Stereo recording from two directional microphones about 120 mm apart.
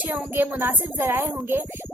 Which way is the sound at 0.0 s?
15° right (ahead or behind).